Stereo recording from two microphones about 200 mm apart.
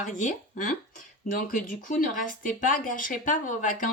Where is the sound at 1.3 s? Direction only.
45° left (ahead or behind).